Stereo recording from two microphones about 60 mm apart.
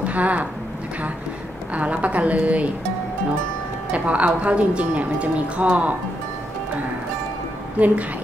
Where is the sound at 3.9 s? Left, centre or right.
Right.